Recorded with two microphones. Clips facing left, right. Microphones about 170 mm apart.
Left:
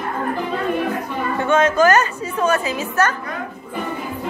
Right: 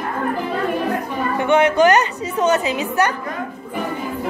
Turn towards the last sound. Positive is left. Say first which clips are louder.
# right 1 dB
turn(degrees=-15)  # may be behind; listen again after turning